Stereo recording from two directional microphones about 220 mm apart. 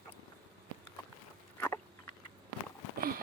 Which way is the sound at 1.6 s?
10° left (ahead or behind).